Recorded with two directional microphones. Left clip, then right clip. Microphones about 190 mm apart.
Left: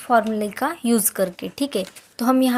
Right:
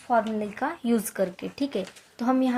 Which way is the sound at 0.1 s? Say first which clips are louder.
Left 6 dB; 50° left (ahead or behind).